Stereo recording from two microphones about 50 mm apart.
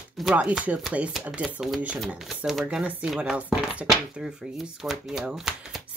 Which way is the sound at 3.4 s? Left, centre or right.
Centre.